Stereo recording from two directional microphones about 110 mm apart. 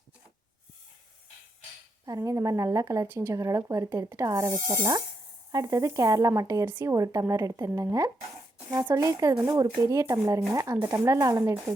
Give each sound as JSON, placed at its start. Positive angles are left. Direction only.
{"t": 2.0, "sound": "speech", "side_deg": -30}
{"t": 6.7, "sound": "speech", "side_deg": -20}
{"t": 6.9, "sound": "speech", "side_deg": -30}